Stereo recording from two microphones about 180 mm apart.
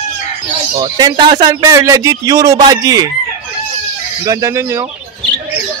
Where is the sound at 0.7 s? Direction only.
25° right (ahead or behind).